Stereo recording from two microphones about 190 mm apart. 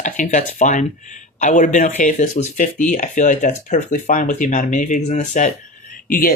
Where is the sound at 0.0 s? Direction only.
40° left (ahead or behind).